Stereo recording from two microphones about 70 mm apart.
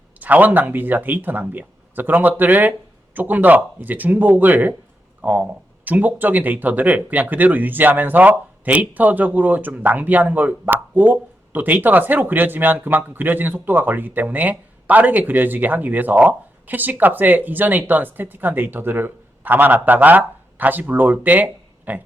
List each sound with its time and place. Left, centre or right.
0.2 s speech: right